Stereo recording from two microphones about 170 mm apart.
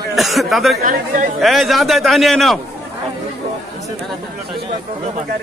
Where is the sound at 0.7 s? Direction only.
55° right (ahead or behind).